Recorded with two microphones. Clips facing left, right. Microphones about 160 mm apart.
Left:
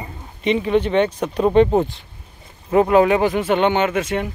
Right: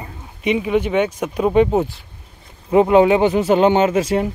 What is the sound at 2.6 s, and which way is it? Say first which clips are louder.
Speech: right 2 dB; 20° right (ahead or behind).